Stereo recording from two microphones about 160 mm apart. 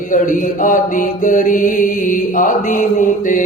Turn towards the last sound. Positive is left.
turn(degrees=55)  # may be behind; listen again after turning